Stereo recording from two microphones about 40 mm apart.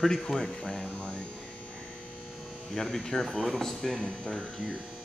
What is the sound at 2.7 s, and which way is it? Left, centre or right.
Speech, centre.